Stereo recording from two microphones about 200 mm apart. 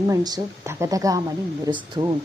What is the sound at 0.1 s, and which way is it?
A woman's voice, 15° right (ahead or behind).